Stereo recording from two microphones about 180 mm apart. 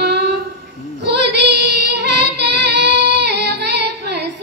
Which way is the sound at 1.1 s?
70° right (ahead or behind).